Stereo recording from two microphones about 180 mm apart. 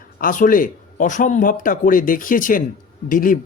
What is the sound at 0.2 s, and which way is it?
A man's voice, 50° left (ahead or behind).